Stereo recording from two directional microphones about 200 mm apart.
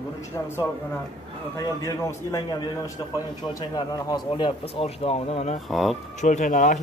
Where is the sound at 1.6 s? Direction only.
15° left (ahead or behind).